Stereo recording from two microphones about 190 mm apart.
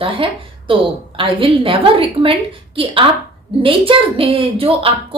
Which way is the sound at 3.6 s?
30° right (ahead or behind).